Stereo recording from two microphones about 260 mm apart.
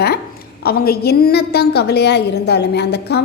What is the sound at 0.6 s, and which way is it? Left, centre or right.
A woman's voice, left.